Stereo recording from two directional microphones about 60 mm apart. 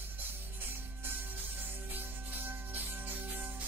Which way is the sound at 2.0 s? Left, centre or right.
Right.